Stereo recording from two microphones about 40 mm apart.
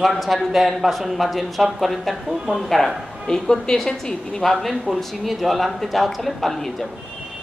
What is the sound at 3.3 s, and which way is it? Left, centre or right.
A woman's voice, centre.